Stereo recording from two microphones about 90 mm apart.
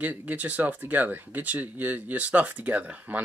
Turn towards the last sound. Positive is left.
turn(degrees=-15)  # may be behind; listen again after turning